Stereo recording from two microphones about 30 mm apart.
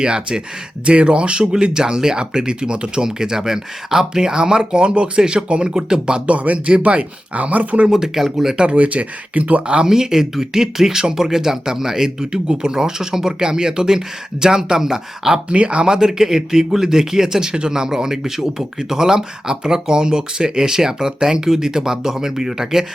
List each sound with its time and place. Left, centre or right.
0.0 s speech: right
1.5 s speech: right
3.0 s speech: right
5.5 s speech: right
5.7 s speech: right
6.2 s speech: right
7.9 s speech: centre
8.7 s speech: right
9.8 s speech: centre
15.4 s speech: right
15.9 s speech: centre